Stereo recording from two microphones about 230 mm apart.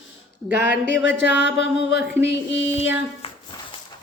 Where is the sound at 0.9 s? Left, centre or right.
Left.